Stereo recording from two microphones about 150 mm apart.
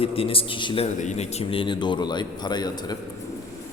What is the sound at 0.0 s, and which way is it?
Speech, 40° left (ahead or behind).